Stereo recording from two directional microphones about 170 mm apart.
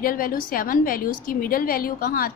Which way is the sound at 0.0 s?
55° left (ahead or behind).